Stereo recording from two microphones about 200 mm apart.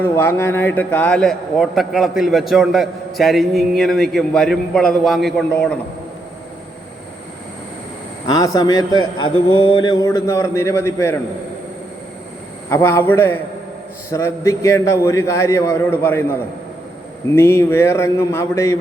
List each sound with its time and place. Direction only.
0.0 s a man's voice: 10° left (ahead or behind)
8.5 s a man's voice: 20° left (ahead or behind)
12.7 s a man's voice: 10° left (ahead or behind)